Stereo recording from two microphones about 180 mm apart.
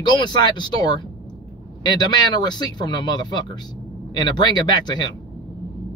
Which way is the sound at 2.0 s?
25° left (ahead or behind).